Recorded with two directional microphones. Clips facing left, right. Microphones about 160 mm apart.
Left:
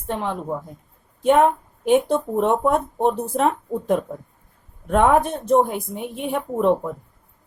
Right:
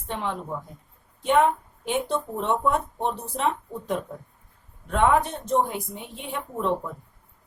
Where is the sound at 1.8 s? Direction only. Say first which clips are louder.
Left 9 dB; 50° left (ahead or behind).